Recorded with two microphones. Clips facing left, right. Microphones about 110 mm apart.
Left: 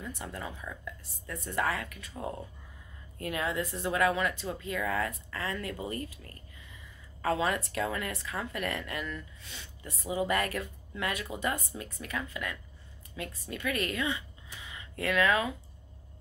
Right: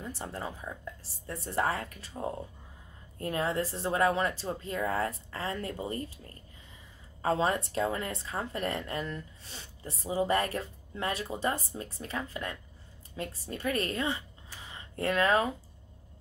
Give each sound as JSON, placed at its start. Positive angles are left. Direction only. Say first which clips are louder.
{"t": 0.0, "sound": "speech", "louder": "right 2 dB", "side_deg": -30}